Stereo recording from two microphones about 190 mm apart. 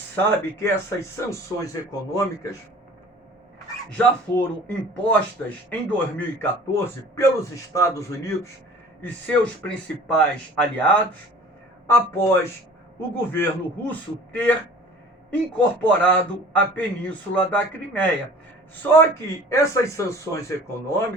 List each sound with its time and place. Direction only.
0.3 s speech: 15° left (ahead or behind)
3.9 s speech: 5° left (ahead or behind)